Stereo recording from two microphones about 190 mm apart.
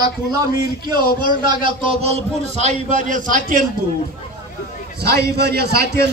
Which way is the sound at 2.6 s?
40° right (ahead or behind).